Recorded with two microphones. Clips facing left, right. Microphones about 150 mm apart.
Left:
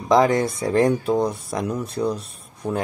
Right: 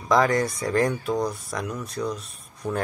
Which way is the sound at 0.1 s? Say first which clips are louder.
Left 4 dB; 25° left (ahead or behind).